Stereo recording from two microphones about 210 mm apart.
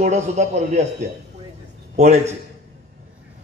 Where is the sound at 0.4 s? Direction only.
35° right (ahead or behind).